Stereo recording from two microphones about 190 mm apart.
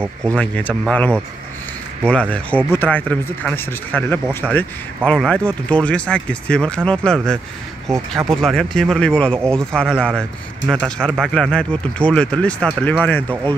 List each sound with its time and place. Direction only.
0.0 s speech: 15° right (ahead or behind)
0.4 s speech: 5° left (ahead or behind)